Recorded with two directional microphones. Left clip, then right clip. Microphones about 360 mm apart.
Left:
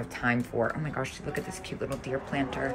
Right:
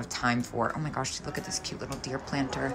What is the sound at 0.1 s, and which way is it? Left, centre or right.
Speech, centre.